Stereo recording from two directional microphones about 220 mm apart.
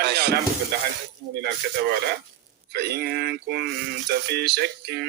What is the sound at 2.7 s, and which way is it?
A man's voice, 45° right (ahead or behind).